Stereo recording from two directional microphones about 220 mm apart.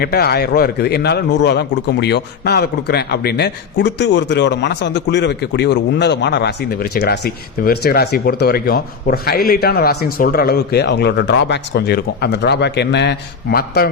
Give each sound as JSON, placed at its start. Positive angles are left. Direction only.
{"t": 0.0, "sound": "a man's voice", "side_deg": 45}